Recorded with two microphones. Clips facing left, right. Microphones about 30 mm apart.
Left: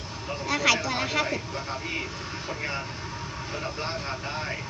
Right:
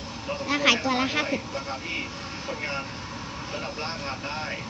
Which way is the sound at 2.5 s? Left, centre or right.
Centre.